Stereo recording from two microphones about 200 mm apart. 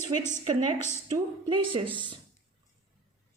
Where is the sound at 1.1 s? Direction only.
25° right (ahead or behind).